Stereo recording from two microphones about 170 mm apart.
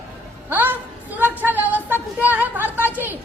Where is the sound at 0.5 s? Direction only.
10° right (ahead or behind).